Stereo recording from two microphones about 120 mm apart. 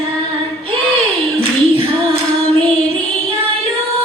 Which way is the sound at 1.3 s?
50° right (ahead or behind).